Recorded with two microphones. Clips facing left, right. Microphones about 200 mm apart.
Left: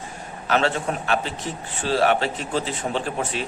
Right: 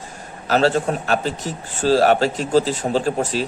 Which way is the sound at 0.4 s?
35° right (ahead or behind).